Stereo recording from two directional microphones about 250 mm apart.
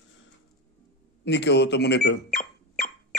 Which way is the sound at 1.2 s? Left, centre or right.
Left.